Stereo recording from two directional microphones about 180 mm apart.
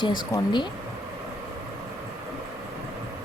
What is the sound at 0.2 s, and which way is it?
Speech, 20° left (ahead or behind).